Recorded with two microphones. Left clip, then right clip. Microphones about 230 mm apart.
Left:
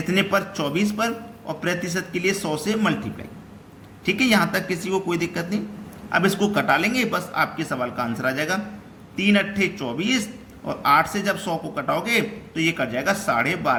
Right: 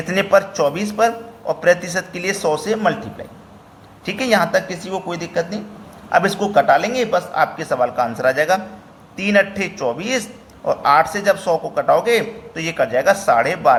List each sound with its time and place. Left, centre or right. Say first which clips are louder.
0.1 s a man's voice: right 7 dB; centre
4.0 s a man's voice: right 3 dB; centre